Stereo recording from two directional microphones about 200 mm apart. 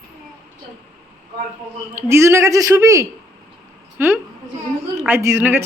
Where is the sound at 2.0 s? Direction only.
10° right (ahead or behind).